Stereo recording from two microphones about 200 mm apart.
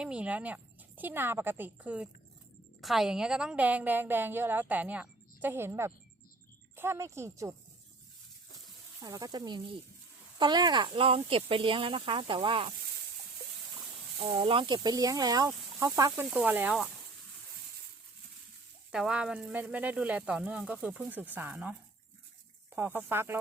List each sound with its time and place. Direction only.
0.0 s a woman's voice: 5° right (ahead or behind)
9.0 s speech: 20° right (ahead or behind)
14.2 s a woman's voice: 30° right (ahead or behind); by 16.9 s 5° right (ahead or behind)
18.9 s a woman's voice: 5° right (ahead or behind)